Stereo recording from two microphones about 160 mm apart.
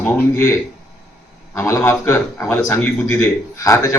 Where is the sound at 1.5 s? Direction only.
15° left (ahead or behind).